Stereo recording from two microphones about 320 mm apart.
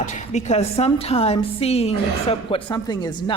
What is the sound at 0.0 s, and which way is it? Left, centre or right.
A woman's voice, left.